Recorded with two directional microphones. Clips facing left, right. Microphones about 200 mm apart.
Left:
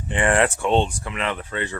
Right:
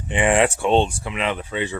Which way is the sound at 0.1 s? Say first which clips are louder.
Right 2 dB; 15° right (ahead or behind).